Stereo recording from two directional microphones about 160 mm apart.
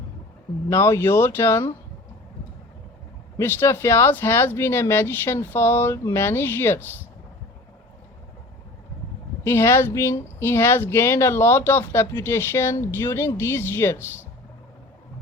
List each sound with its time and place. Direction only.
0.7 s speech: 15° left (ahead or behind)
3.3 s speech: 15° left (ahead or behind)
9.4 s speech: 15° left (ahead or behind)